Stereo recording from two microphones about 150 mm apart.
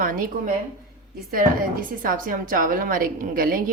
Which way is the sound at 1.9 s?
65° right (ahead or behind).